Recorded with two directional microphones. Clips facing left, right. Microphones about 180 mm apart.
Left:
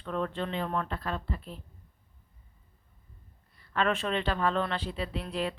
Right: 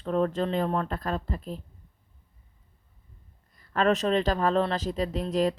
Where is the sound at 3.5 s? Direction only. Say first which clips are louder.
Right 5 dB; 40° right (ahead or behind).